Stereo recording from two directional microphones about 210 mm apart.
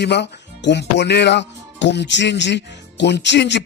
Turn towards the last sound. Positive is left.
turn(degrees=55)  # may be behind; listen again after turning